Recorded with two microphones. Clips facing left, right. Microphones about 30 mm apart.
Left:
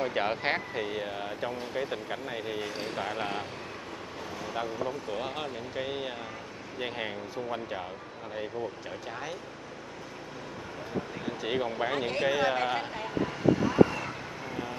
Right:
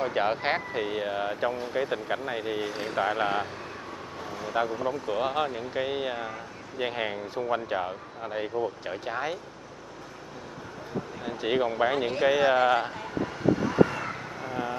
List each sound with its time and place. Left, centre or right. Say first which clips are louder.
0.0 s speech: right 3 dB; centre
4.8 s speech: right 6 dB; centre
11.2 s speech: right 6 dB; centre
12.9 s vehicle: even; centre
13.6 s vehicle: left 1 dB; centre